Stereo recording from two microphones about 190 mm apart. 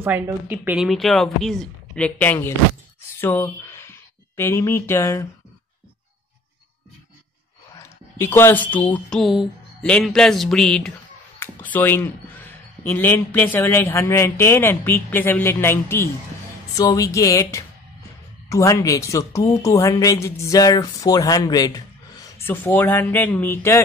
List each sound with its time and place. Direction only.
0.0 s speech: 10° right (ahead or behind); by 5.2 s 15° left (ahead or behind)
8.2 s speech: 10° left (ahead or behind)